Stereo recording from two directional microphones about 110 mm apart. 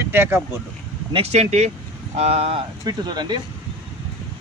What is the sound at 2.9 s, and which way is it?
Speech, 40° right (ahead or behind).